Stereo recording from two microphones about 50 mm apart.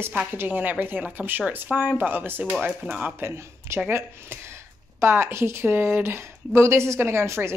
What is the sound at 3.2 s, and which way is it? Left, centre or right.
Speech, right.